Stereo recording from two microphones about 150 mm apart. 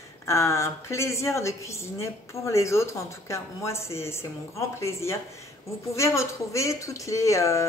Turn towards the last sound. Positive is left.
turn(degrees=20)  # may be behind; listen again after turning